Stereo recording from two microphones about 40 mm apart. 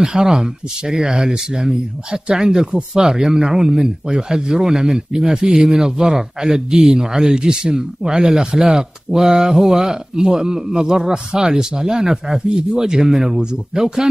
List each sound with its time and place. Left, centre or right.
0.0 s speech: centre